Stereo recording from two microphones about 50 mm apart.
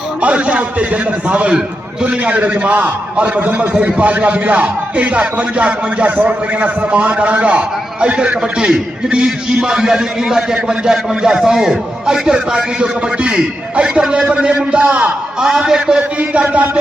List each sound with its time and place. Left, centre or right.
0.2 s a man's voice: right
16.3 s a man's voice: right